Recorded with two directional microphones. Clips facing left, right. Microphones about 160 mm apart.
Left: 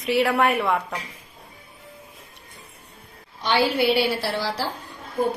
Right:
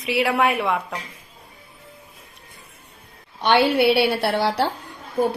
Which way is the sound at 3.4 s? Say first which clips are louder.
Right 4 dB; 65° right (ahead or behind).